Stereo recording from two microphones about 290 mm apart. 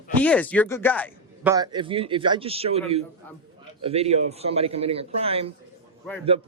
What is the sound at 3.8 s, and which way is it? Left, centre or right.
A man's voice, right.